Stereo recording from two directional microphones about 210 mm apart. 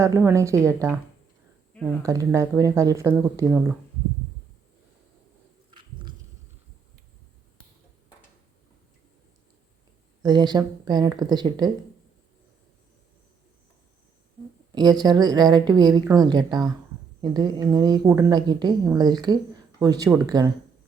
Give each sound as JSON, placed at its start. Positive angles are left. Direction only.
{"t": 0.0, "sound": "speech", "side_deg": -10}
{"t": 2.0, "sound": "speech", "side_deg": -15}
{"t": 10.2, "sound": "a woman's voice", "side_deg": -20}
{"t": 14.8, "sound": "a woman's voice", "side_deg": -20}